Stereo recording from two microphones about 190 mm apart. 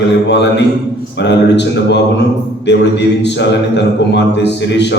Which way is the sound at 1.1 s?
65° left (ahead or behind).